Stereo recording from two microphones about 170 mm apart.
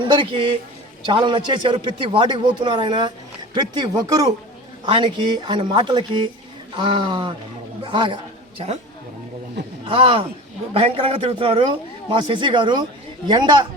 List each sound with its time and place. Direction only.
0.1 s a man's voice: 30° right (ahead or behind)
9.8 s a man's voice: 30° right (ahead or behind)